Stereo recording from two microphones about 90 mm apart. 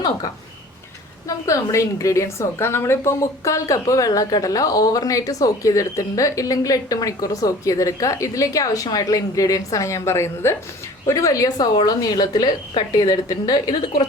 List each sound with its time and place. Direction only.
1.5 s a woman's voice: 35° left (ahead or behind)